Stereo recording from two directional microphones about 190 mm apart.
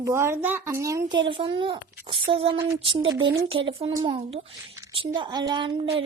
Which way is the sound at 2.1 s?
25° right (ahead or behind).